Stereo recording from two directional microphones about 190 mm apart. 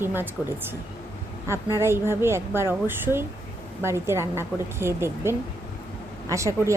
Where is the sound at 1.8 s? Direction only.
15° right (ahead or behind).